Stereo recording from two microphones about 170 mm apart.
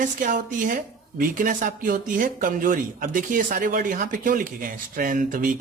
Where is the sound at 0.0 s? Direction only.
55° right (ahead or behind).